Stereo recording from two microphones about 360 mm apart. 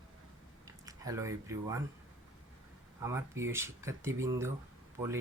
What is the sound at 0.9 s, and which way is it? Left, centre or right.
Speech, centre.